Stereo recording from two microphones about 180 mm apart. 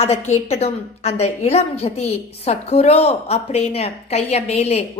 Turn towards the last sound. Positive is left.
turn(degrees=35)  # may be behind; listen again after turning